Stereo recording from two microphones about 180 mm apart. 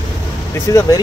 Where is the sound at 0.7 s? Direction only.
20° left (ahead or behind).